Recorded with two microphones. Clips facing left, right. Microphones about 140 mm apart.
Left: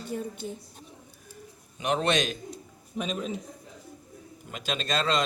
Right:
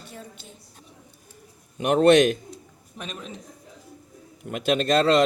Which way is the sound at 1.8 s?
55° right (ahead or behind).